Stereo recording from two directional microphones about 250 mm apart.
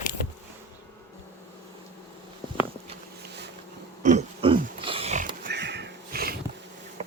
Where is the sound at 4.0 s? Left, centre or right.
Right.